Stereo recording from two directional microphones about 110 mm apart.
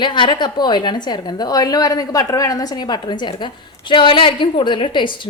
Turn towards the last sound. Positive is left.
turn(degrees=50)  # may be behind; listen again after turning